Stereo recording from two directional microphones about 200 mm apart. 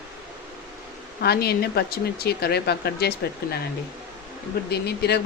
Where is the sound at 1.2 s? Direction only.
50° left (ahead or behind).